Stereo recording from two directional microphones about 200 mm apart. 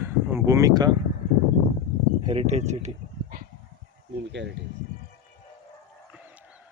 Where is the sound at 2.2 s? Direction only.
35° right (ahead or behind).